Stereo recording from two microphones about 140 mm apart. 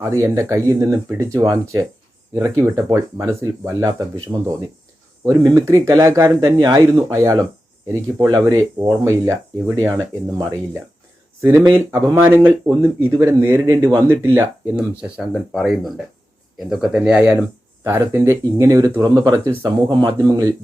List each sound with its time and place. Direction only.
0.0 s speech: 20° right (ahead or behind)
5.5 s speech: 20° right (ahead or behind)
11.9 s speech: 20° right (ahead or behind)
15.2 s speech: 5° right (ahead or behind)
17.8 s speech: 15° right (ahead or behind)